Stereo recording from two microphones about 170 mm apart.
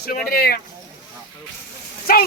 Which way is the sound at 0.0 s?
60° left (ahead or behind).